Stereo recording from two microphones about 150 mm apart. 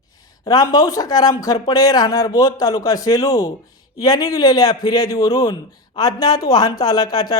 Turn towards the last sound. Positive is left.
turn(degrees=25)  # may be behind; listen again after turning